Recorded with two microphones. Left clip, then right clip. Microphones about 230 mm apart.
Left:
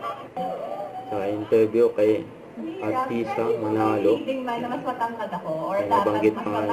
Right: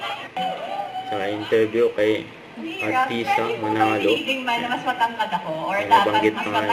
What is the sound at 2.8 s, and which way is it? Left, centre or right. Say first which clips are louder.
Speech: right 5 dB; centre.